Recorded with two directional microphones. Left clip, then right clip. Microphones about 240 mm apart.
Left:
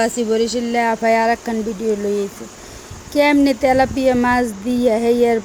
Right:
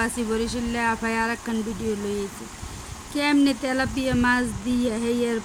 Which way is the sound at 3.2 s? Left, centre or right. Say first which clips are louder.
Left 8 dB; centre.